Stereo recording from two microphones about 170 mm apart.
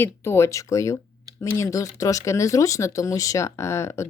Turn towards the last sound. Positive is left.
turn(degrees=15)  # may be behind; listen again after turning